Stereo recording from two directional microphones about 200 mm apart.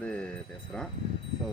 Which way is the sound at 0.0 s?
5° left (ahead or behind).